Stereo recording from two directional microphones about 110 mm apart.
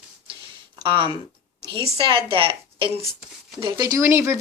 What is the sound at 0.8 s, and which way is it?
A woman's voice, 50° right (ahead or behind).